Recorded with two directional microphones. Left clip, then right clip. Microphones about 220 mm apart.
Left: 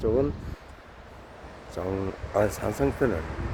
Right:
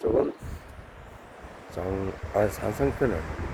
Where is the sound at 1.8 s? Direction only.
5° left (ahead or behind).